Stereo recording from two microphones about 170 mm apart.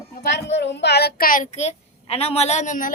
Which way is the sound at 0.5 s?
90° left.